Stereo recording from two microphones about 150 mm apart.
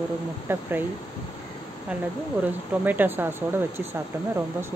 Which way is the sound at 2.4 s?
10° right (ahead or behind).